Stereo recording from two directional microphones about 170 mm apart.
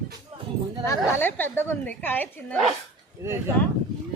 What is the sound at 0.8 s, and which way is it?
A woman's voice, 15° left (ahead or behind).